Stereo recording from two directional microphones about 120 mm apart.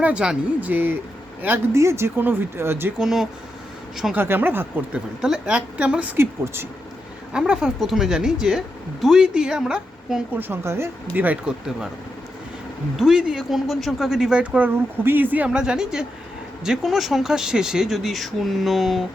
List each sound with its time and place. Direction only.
0.0 s a woman's voice: 10° right (ahead or behind)
3.0 s speech: 5° right (ahead or behind)
4.1 s a woman's voice: 15° right (ahead or behind)
7.3 s speech: 10° right (ahead or behind)
10.5 s a woman's voice: 20° right (ahead or behind)
13.0 s a woman's voice: 5° right (ahead or behind)